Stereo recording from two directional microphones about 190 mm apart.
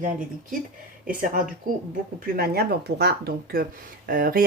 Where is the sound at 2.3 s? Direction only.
55° right (ahead or behind).